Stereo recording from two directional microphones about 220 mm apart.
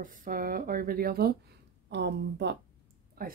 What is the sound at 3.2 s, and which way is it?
Speech, 40° right (ahead or behind).